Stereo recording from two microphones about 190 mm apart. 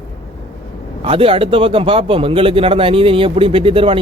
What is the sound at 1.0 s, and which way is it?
Speech, 30° right (ahead or behind).